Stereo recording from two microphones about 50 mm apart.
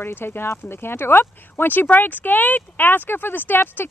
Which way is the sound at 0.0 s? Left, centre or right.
Left.